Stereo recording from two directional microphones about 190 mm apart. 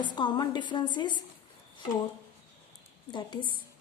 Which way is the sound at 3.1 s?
25° left (ahead or behind).